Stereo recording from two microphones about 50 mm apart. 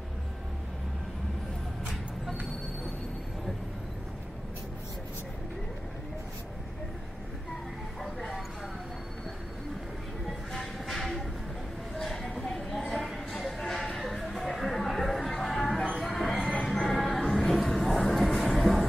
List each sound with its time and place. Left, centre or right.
8.0 s vehicle: centre
10.5 s music: centre
12.0 s a sound: centre
13.9 s music: centre